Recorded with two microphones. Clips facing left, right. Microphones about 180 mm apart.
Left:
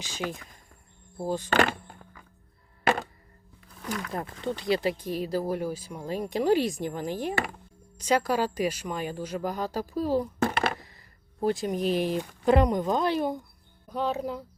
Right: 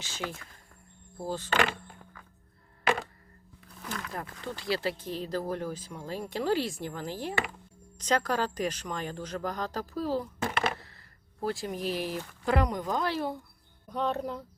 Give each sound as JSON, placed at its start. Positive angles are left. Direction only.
{"t": 0.0, "sound": "speech", "side_deg": 15}
{"t": 1.5, "sound": "speech", "side_deg": 45}
{"t": 4.1, "sound": "speech", "side_deg": 20}
{"t": 13.9, "sound": "speech", "side_deg": 5}